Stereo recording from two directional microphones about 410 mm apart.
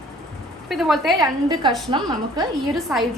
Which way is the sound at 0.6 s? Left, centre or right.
Centre.